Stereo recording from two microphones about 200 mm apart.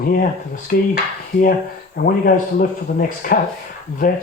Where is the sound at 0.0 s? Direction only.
45° left (ahead or behind).